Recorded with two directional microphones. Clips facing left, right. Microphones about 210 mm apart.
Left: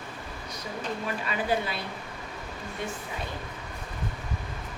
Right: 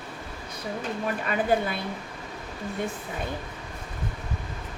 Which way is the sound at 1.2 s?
50° right (ahead or behind).